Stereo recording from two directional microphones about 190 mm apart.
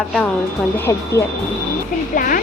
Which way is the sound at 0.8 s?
15° left (ahead or behind).